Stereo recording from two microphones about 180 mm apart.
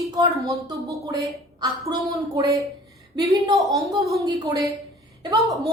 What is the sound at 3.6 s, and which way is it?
Speech, 20° right (ahead or behind).